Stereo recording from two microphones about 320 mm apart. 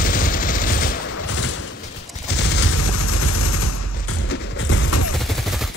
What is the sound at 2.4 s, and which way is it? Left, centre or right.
Fusillade, left.